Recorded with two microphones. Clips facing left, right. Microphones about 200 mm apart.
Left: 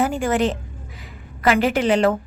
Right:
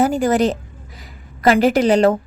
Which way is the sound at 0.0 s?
40° right (ahead or behind).